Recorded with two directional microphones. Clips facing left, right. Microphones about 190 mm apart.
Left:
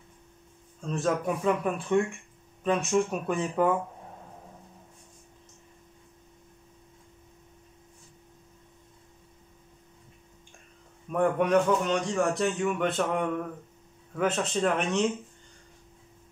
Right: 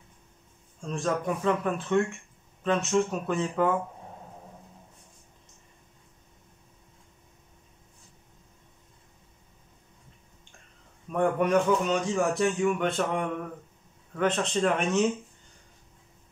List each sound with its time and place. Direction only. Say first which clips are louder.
0.7 s speech: left 1 dB; 5° left (ahead or behind)
11.1 s a man's voice: even; centre (ahead or behind)